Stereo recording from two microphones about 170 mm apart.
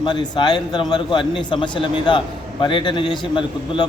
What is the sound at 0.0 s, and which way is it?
A man's voice, 25° left (ahead or behind).